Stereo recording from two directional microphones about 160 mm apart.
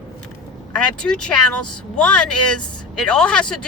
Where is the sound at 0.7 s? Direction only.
5° left (ahead or behind).